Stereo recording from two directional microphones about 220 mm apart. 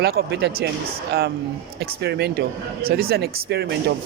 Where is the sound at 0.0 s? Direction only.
45° right (ahead or behind).